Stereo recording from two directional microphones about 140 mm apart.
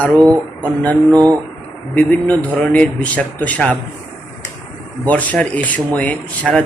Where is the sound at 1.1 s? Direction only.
25° right (ahead or behind).